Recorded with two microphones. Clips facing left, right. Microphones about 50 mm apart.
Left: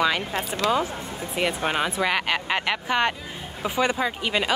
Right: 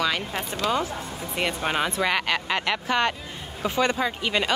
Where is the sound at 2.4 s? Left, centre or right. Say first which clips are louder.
Even; centre.